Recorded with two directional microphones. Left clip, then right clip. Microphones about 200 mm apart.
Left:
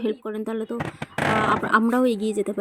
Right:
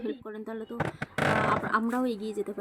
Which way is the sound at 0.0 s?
35° left (ahead or behind).